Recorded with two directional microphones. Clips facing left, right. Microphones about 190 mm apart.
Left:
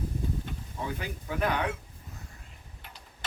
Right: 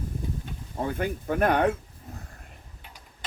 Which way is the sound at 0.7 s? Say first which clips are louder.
Right 8 dB; 50° right (ahead or behind).